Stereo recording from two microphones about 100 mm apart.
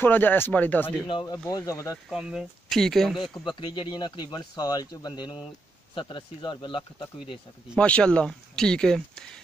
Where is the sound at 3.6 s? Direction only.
50° left (ahead or behind).